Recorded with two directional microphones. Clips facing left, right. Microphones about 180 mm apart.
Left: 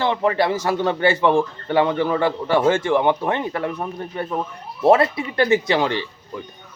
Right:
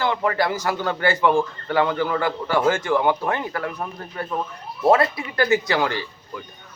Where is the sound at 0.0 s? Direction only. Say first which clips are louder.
Left 3 dB; 25° left (ahead or behind).